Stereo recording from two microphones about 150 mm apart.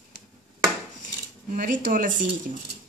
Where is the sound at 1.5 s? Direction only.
65° right (ahead or behind).